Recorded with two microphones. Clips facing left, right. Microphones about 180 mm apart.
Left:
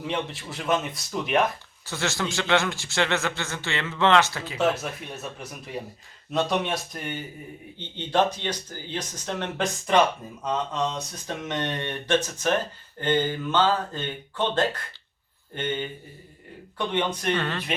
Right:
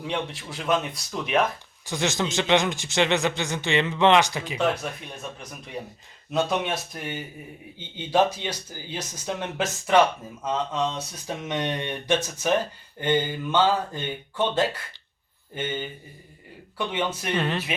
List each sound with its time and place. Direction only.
0.1 s speech: centre (ahead or behind)
1.8 s a man's voice: 15° right (ahead or behind)
4.5 s speech: 5° left (ahead or behind)
6.3 s a man's voice: centre (ahead or behind)
17.3 s a man's voice: 15° right (ahead or behind)